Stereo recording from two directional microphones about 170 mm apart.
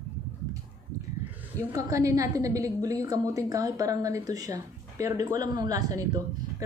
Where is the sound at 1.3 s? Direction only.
15° right (ahead or behind).